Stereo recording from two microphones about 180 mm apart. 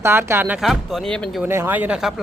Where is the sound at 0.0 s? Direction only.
15° right (ahead or behind).